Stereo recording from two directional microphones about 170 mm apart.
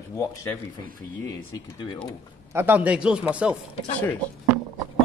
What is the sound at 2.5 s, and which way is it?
Speech, 10° right (ahead or behind).